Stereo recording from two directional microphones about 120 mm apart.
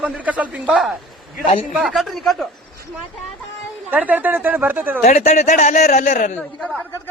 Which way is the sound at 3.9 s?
15° right (ahead or behind).